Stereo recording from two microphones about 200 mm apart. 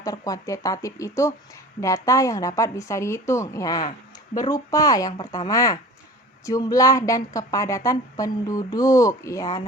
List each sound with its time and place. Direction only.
0.0 s a woman's voice: 15° left (ahead or behind)